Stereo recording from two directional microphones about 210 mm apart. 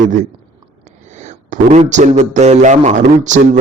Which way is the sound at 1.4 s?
35° right (ahead or behind).